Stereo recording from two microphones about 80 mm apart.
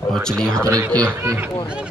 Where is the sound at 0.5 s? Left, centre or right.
Right.